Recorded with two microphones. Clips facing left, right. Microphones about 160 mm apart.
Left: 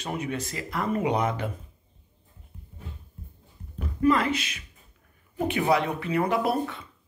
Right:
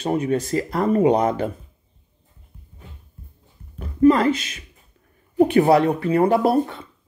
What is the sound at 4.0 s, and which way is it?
Speech, 35° right (ahead or behind).